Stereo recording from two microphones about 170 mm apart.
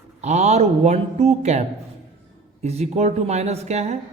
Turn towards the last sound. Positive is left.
turn(degrees=-40)  # may be behind; listen again after turning